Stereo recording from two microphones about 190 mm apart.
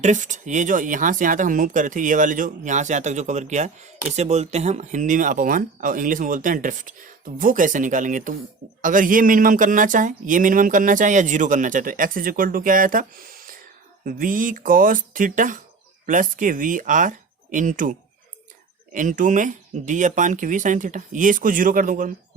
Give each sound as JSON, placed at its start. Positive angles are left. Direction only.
{"t": 0.0, "sound": "speech", "side_deg": -40}
{"t": 18.9, "sound": "speech", "side_deg": -45}